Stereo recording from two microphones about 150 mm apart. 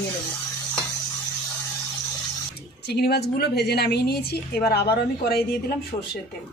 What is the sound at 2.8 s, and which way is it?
A woman's voice, 90° left.